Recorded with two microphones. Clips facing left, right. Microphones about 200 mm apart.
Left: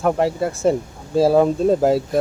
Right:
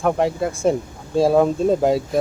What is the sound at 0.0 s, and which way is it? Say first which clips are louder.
Speech: left 1 dB; 5° left (ahead or behind).